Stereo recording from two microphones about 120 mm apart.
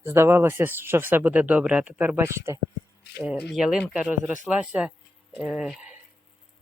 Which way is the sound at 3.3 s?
5° right (ahead or behind).